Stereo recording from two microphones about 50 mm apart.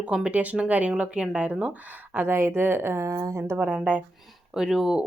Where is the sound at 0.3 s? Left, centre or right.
Right.